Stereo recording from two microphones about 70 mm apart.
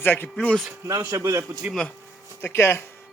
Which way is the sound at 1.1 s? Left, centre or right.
Right.